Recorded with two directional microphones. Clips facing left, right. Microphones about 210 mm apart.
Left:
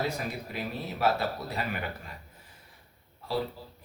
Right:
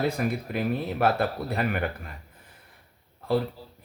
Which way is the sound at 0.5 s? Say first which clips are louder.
Right 8 dB; 55° right (ahead or behind).